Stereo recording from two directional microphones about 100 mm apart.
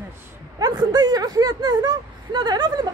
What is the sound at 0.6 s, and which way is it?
Speech, 45° right (ahead or behind).